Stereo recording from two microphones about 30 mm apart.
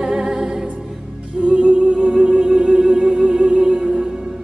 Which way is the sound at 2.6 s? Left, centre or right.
Right.